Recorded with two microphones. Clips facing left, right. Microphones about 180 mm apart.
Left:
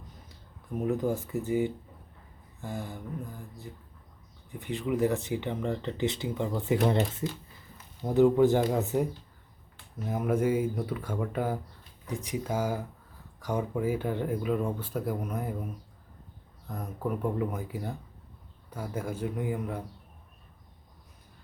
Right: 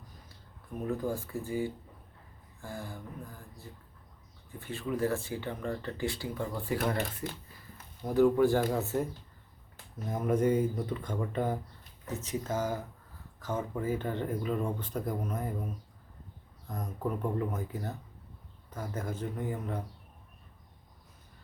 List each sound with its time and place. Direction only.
0.9 s speech: 20° left (ahead or behind)
10.1 s speech: 5° left (ahead or behind)